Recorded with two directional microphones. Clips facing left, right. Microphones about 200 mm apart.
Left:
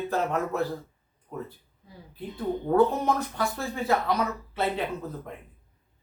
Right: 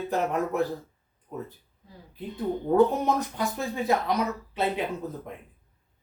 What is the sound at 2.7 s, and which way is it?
Speech, 15° right (ahead or behind).